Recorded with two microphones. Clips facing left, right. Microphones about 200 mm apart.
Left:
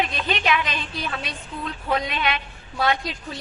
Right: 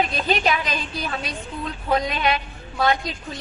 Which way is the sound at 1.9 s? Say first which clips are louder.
Right 4 dB; 40° right (ahead or behind).